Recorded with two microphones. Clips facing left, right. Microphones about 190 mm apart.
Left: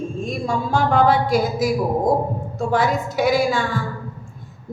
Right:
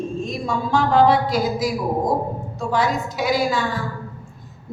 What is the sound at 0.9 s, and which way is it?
A woman's voice, 50° left (ahead or behind).